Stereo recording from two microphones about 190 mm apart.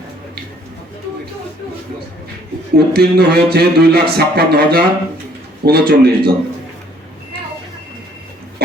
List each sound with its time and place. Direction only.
2.7 s speech: 55° right (ahead or behind)